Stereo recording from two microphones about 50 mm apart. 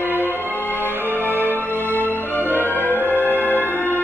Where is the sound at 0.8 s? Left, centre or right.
Right.